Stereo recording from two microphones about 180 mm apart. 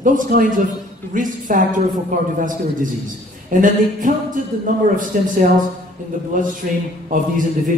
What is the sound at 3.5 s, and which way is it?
A woman's voice, 45° right (ahead or behind).